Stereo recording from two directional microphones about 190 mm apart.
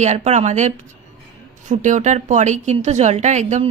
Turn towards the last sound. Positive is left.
turn(degrees=-40)  # may be behind; listen again after turning